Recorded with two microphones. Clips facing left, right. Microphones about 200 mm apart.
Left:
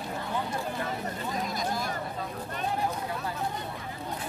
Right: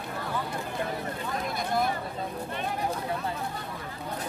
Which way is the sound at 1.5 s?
60° right (ahead or behind).